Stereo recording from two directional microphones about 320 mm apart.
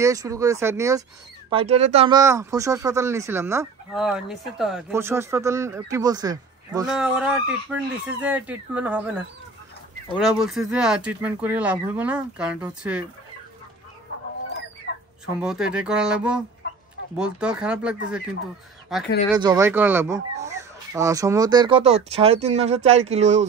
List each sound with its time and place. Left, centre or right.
0.0 s speech: centre
15.4 s speech: centre
19.3 s speech: centre